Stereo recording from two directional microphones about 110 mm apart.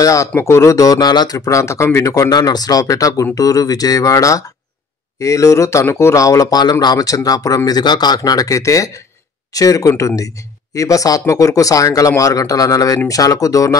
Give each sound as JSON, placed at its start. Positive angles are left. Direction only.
{"t": 0.0, "sound": "speech", "side_deg": 30}